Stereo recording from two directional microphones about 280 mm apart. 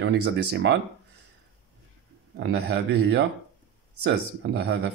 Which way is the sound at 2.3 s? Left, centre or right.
Right.